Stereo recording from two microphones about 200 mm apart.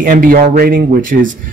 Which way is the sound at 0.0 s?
45° right (ahead or behind).